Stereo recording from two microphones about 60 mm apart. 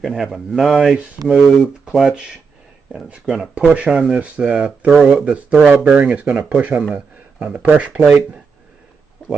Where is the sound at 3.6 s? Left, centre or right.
Right.